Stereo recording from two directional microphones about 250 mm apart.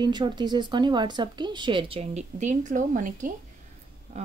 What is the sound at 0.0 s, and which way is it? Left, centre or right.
Speech, centre.